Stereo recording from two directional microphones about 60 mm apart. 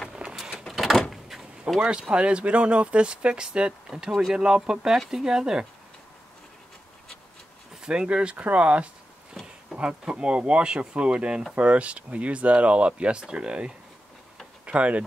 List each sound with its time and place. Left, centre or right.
0.1 s vehicle: centre
0.7 s door: centre
1.8 s speech: centre
7.7 s speech: centre